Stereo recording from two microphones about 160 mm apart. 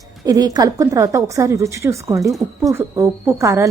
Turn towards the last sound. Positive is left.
turn(degrees=-15)  # may be behind; listen again after turning